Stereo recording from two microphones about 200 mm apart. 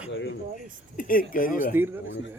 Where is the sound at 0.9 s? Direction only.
40° left (ahead or behind).